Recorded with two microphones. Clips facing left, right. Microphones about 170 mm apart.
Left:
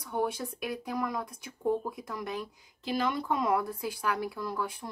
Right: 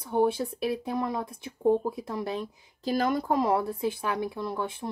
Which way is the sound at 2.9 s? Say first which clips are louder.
Right 4 dB; 40° right (ahead or behind).